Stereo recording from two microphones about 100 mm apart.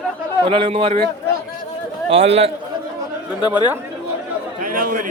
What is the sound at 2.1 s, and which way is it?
Speech, 90° right.